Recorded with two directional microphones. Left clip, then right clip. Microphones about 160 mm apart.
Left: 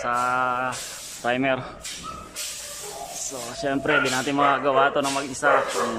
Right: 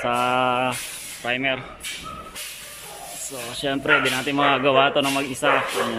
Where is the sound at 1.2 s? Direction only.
10° left (ahead or behind).